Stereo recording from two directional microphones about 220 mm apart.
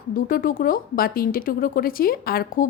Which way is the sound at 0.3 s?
40° left (ahead or behind).